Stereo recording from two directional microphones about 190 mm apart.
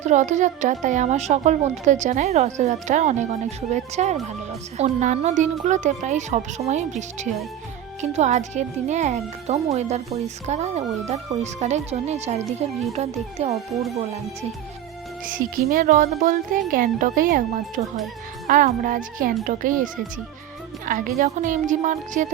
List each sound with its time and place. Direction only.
0.0 s speech: 40° right (ahead or behind)
8.1 s speech: 35° right (ahead or behind)
15.3 s speech: 45° right (ahead or behind)